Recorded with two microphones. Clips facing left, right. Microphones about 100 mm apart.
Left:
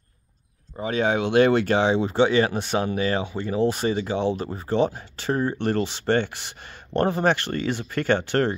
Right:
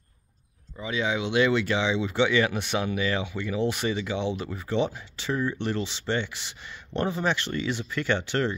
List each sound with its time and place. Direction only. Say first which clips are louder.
0.7 s speech: left 5 dB; 45° left (ahead or behind)